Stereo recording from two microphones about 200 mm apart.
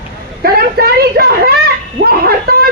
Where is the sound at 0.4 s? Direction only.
50° right (ahead or behind).